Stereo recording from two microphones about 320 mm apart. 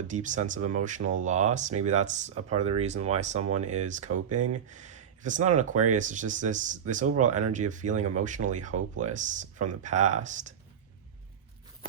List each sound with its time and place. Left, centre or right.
0.1 s speech: right